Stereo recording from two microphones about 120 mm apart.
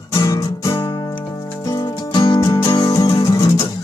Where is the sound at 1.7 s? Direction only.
40° left (ahead or behind).